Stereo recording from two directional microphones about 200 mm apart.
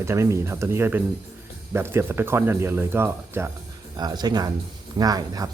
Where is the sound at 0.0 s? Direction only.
15° right (ahead or behind).